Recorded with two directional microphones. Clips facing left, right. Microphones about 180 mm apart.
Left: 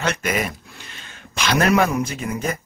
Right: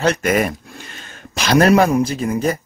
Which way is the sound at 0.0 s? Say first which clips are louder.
Right 7 dB; 40° right (ahead or behind).